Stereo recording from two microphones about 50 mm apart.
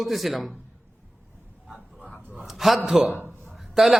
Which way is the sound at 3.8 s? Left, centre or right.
Centre.